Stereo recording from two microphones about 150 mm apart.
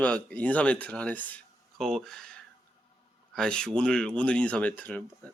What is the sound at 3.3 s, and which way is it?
Speech, 5° left (ahead or behind).